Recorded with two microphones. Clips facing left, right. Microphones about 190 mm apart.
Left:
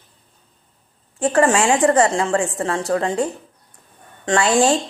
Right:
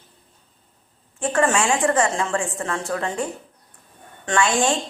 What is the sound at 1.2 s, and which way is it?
A woman's voice, 35° left (ahead or behind).